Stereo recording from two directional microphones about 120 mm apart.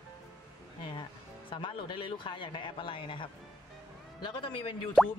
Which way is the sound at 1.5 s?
45° left (ahead or behind).